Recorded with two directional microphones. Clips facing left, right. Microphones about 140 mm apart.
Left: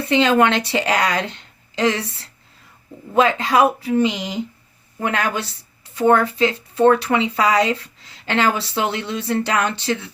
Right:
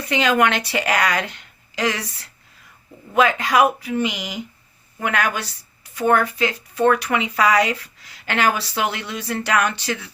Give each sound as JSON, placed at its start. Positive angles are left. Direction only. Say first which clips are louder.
{"t": 0.0, "sound": "speech", "louder": "left 3 dB", "side_deg": 25}